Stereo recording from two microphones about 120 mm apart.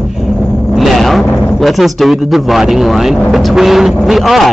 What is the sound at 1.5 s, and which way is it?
Speech, centre (ahead or behind).